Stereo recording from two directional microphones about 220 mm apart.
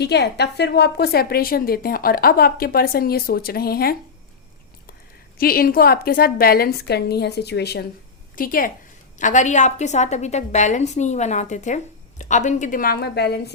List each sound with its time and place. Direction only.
0.0 s a woman's voice: 50° left (ahead or behind)
5.4 s a woman's voice: 40° left (ahead or behind)